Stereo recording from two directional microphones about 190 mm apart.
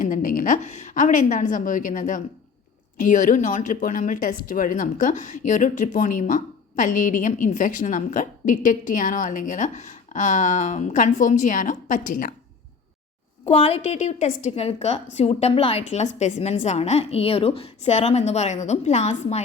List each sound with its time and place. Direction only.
0.0 s speech: 45° left (ahead or behind)
13.5 s a woman's voice: 30° left (ahead or behind)